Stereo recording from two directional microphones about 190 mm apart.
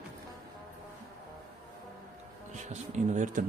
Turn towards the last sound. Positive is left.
turn(degrees=-40)  # may be behind; listen again after turning